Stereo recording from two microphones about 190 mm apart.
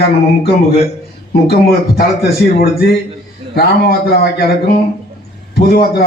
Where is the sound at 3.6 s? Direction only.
55° left (ahead or behind).